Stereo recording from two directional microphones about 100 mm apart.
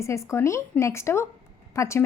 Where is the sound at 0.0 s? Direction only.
30° left (ahead or behind).